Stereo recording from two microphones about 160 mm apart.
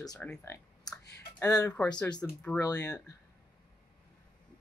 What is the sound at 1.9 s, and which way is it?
Speech, 25° left (ahead or behind).